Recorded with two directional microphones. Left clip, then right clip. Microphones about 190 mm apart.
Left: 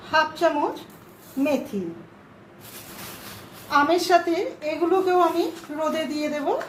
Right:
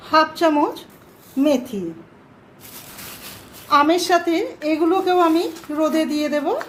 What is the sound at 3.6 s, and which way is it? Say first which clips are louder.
A woman's voice: right 4 dB; 35° right (ahead or behind).